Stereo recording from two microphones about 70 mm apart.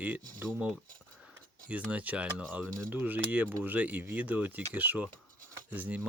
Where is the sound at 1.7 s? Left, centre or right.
Right.